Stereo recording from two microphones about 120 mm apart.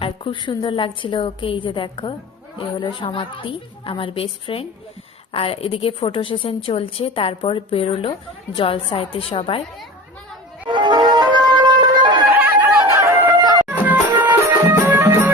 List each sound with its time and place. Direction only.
0.0 s a woman's voice: 45° left (ahead or behind)
10.7 s music: 40° right (ahead or behind)
12.3 s a sound: 15° right (ahead or behind)
13.4 s music: 35° right (ahead or behind)
13.7 s music: 15° right (ahead or behind)